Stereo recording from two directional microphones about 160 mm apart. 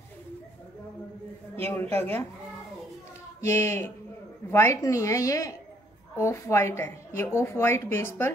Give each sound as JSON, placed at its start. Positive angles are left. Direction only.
{"t": 1.7, "sound": "a woman's voice", "side_deg": 10}
{"t": 3.3, "sound": "a woman's voice", "side_deg": 15}